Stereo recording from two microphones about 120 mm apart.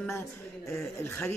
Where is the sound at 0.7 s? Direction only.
20° left (ahead or behind).